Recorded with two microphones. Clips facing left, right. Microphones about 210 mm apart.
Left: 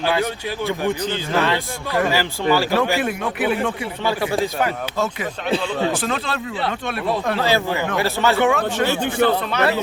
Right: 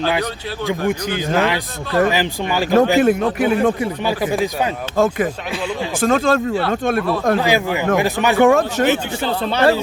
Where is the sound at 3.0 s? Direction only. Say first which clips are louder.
Right 6 dB; 40° right (ahead or behind).